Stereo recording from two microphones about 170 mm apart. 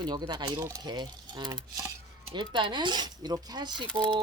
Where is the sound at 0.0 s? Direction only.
25° right (ahead or behind).